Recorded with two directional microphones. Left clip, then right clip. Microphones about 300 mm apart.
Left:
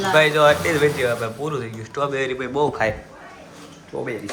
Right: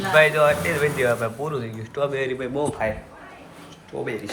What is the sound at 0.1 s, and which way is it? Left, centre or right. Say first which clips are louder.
Speech: left 1 dB; centre.